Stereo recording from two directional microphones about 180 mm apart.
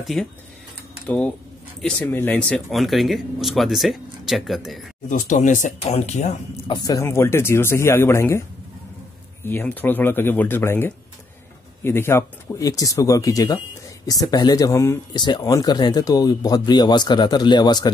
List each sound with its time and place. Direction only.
0.0 s speech: centre (ahead or behind)
5.0 s speech: 45° left (ahead or behind)
6.7 s speech: 20° left (ahead or behind)